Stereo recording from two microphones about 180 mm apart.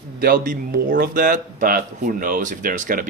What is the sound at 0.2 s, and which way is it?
Speech, 55° right (ahead or behind).